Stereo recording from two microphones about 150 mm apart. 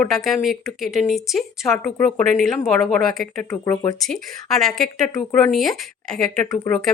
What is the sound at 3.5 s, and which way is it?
Speech, 15° left (ahead or behind).